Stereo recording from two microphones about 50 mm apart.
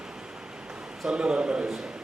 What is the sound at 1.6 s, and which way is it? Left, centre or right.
Speech, centre.